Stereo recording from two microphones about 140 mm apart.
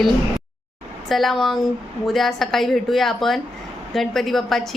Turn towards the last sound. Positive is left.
turn(degrees=0)  # may be behind; listen again after turning